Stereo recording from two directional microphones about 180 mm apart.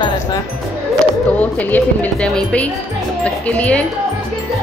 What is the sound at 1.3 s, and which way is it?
Speech, 10° left (ahead or behind).